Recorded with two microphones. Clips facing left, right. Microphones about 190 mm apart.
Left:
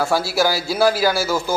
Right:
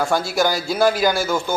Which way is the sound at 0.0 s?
5° left (ahead or behind).